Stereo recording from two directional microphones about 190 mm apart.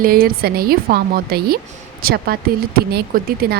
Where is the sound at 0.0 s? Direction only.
50° right (ahead or behind).